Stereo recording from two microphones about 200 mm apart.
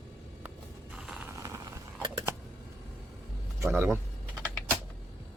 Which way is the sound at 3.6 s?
10° right (ahead or behind).